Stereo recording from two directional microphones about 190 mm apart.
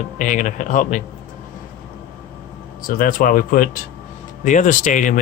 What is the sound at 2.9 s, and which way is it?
Speech, 50° left (ahead or behind).